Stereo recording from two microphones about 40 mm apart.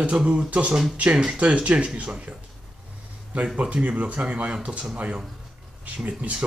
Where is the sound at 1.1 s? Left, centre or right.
Centre.